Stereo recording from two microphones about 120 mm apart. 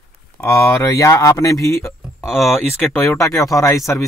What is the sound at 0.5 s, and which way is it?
Speech, 25° left (ahead or behind).